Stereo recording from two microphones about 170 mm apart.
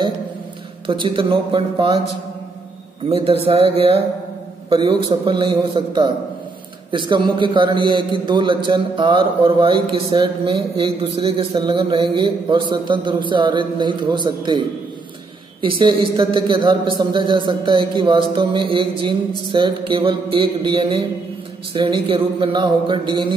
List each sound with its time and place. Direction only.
0.8 s a man's voice: 30° right (ahead or behind)
3.1 s a sound: 35° right (ahead or behind)
4.6 s a man's voice: 30° right (ahead or behind)
15.6 s a man's voice: 30° right (ahead or behind)